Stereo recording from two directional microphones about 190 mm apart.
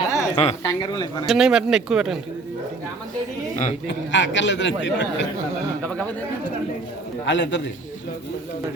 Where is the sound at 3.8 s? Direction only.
70° left (ahead or behind).